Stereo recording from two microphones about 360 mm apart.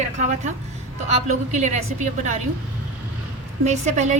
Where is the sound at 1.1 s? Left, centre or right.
Centre.